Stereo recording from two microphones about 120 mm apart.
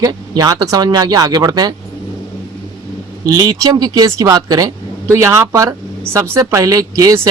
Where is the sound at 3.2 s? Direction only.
30° right (ahead or behind).